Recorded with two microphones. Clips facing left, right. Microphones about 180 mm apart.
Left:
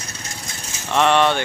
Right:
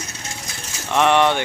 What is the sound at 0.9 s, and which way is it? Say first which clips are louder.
Speech: even; 15° right (ahead or behind).